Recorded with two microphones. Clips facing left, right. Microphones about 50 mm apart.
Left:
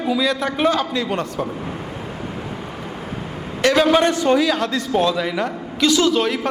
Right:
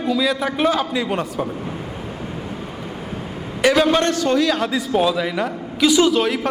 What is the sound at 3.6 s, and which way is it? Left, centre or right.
Speech, centre.